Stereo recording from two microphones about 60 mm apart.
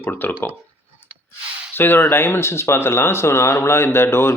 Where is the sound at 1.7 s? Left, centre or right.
Left.